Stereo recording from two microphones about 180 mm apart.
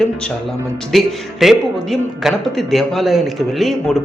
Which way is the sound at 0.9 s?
Centre (ahead or behind).